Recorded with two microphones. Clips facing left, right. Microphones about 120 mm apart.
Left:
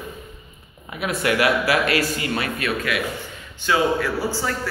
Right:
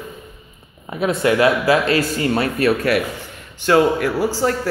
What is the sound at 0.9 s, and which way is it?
Speech, 30° right (ahead or behind).